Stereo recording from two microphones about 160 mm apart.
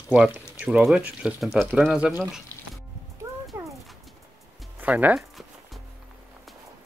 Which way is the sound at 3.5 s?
15° right (ahead or behind).